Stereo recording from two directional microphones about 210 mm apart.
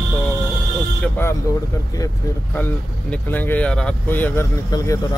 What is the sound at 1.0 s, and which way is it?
Speech, 10° left (ahead or behind).